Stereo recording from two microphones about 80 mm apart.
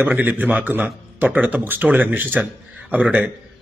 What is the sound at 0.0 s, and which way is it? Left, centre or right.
A man's voice, right.